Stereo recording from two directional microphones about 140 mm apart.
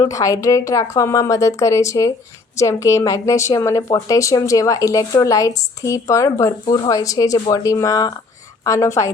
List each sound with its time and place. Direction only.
0.0 s a woman's voice: 25° left (ahead or behind)